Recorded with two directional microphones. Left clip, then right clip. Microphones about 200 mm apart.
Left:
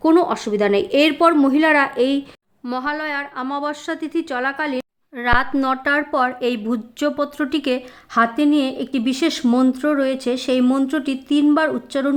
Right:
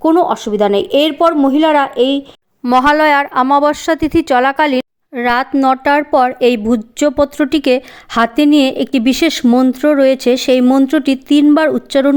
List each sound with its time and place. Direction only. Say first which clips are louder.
0.0 s speech: right 4 dB; 15° right (ahead or behind)
2.7 s a woman's voice: right 14 dB; 45° right (ahead or behind)